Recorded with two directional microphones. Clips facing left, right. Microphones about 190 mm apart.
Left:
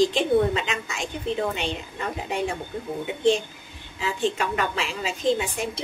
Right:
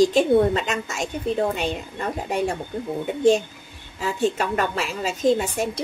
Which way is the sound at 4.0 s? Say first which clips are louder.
Right 3 dB; 40° right (ahead or behind).